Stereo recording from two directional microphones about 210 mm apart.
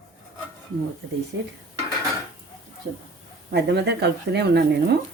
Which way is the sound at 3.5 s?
50° right (ahead or behind).